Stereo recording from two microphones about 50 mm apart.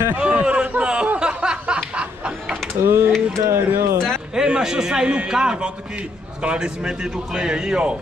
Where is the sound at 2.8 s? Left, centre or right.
Right.